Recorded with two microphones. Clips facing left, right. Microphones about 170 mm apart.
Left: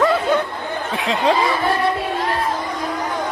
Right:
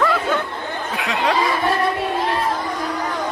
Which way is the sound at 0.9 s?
25° left (ahead or behind).